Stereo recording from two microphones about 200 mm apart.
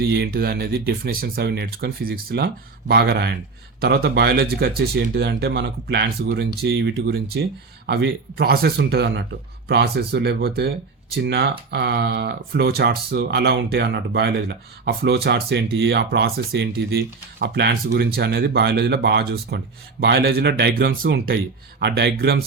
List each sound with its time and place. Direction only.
0.0 s speech: 50° right (ahead or behind)